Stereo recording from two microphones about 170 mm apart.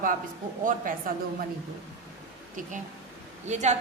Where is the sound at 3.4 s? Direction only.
45° right (ahead or behind).